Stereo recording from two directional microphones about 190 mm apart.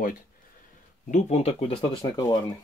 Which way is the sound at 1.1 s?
35° left (ahead or behind).